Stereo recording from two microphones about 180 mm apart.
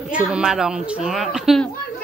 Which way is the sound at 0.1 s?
5° right (ahead or behind).